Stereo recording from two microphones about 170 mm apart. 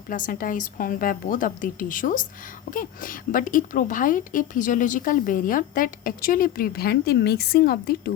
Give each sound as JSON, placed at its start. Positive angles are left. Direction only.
{"t": 0.1, "sound": "a woman's voice", "side_deg": 55}